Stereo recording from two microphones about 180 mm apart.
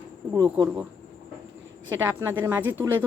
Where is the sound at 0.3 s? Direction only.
25° right (ahead or behind).